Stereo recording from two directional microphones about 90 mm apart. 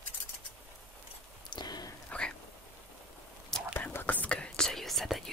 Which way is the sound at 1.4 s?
50° left (ahead or behind).